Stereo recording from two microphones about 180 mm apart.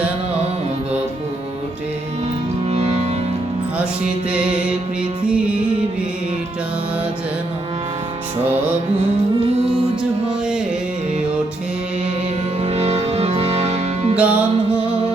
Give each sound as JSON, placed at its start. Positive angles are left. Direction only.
{"t": 2.6, "sound": "music", "side_deg": -35}
{"t": 4.3, "sound": "music", "side_deg": -5}
{"t": 12.6, "sound": "music", "side_deg": -35}
{"t": 14.2, "sound": "music", "side_deg": -5}